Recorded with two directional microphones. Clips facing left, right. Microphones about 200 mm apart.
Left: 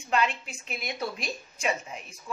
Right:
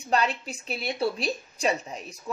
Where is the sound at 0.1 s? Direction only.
35° right (ahead or behind).